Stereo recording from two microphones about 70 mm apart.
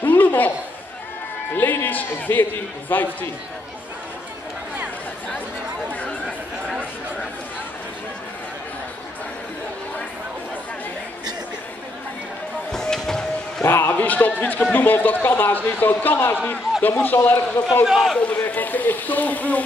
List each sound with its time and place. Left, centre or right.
0.0 s a sound: left
1.5 s a sound: left
2.9 s a man's voice: left
5.9 s chatter: centre
12.7 s music: centre
13.7 s a man's voice: left
17.8 s a man's voice: centre
18.4 s a man's voice: left